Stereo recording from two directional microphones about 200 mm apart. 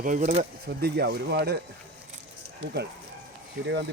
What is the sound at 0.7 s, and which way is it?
Speech, 55° right (ahead or behind).